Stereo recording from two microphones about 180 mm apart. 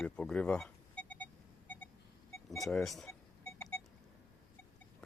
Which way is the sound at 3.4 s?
10° left (ahead or behind).